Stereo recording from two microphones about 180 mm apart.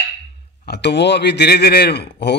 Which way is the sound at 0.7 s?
70° left (ahead or behind).